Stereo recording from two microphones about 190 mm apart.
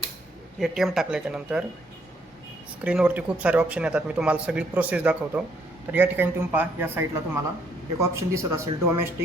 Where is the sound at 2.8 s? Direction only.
5° right (ahead or behind).